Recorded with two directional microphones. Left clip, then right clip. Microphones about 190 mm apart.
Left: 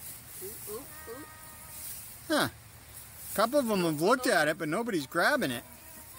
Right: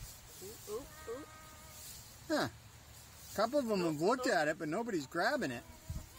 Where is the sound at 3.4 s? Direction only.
5° left (ahead or behind).